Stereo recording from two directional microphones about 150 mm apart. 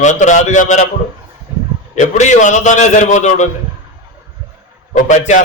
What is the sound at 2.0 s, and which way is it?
A man's voice, 50° left (ahead or behind).